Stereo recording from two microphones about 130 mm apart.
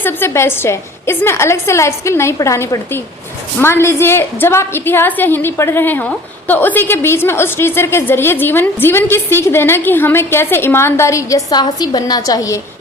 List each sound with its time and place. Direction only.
0.0 s a woman's voice: 15° left (ahead or behind)